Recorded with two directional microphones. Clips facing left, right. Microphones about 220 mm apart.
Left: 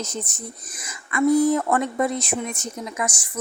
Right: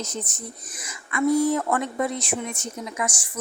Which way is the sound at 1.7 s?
45° left (ahead or behind).